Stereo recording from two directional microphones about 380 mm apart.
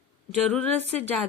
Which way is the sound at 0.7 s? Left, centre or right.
Centre.